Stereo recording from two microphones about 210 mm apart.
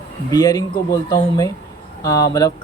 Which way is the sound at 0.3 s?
20° left (ahead or behind).